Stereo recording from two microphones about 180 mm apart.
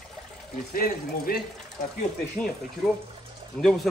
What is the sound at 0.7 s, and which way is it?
Speech, 55° left (ahead or behind).